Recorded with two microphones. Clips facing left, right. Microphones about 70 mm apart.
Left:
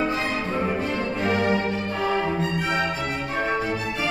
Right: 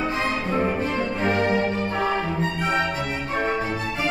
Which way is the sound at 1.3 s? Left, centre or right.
Centre.